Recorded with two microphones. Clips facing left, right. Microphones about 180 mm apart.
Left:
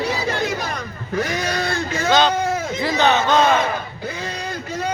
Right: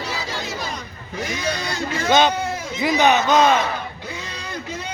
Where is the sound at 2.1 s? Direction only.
20° right (ahead or behind).